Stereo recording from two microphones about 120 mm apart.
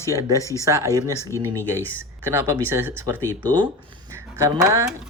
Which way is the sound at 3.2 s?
15° left (ahead or behind).